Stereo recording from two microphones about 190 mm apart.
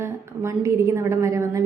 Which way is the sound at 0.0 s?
15° right (ahead or behind).